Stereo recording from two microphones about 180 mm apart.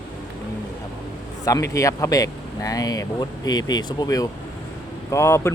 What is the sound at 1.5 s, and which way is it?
A man's voice, 20° left (ahead or behind).